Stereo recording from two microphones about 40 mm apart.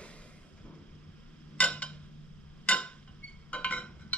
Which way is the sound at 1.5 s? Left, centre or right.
Left.